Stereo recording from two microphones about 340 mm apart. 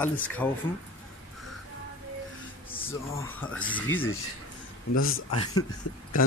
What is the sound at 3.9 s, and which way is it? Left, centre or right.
Speech, left.